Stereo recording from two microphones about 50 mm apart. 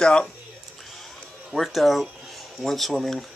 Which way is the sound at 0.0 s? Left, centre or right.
Centre.